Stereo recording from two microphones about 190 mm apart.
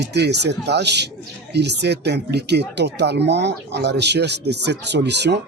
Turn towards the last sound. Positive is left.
turn(degrees=-65)  # may be behind; listen again after turning